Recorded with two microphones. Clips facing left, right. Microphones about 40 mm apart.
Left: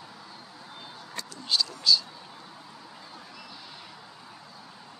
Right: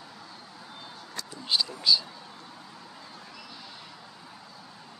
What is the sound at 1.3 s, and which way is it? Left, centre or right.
Speech, centre.